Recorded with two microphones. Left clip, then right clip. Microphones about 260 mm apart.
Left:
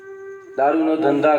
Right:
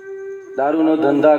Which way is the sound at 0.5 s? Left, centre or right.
Right.